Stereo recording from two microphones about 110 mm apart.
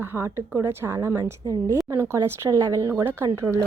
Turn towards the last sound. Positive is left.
turn(degrees=-25)  # may be behind; listen again after turning